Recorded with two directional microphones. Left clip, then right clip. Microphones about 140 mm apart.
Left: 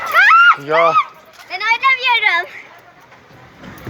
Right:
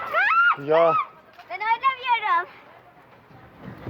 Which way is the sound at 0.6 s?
60° right (ahead or behind).